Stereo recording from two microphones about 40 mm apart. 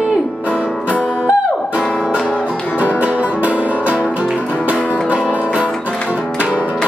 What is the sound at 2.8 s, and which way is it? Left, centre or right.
Music, right.